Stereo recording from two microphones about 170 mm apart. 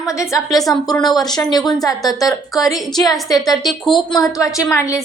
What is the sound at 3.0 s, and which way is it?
Speech, 20° left (ahead or behind).